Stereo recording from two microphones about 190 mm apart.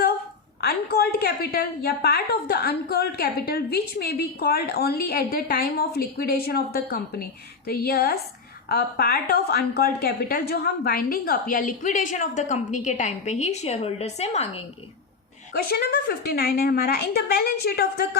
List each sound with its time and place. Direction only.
0.6 s a woman's voice: 55° left (ahead or behind); by 14.6 s 35° left (ahead or behind)
15.5 s a woman's voice: 55° left (ahead or behind)